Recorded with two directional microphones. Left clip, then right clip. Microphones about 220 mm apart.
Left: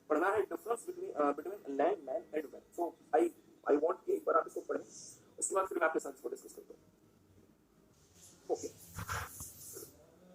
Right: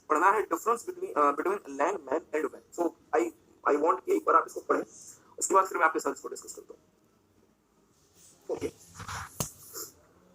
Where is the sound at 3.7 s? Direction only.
35° right (ahead or behind).